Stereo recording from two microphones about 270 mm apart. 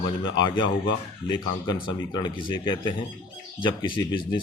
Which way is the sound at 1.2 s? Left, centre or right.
Centre.